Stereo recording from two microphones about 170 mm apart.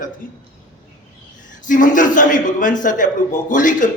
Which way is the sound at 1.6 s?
50° left (ahead or behind).